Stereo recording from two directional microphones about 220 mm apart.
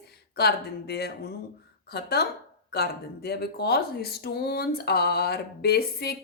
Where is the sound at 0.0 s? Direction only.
45° left (ahead or behind).